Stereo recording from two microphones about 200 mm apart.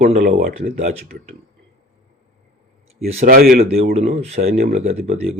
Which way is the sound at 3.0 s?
30° right (ahead or behind).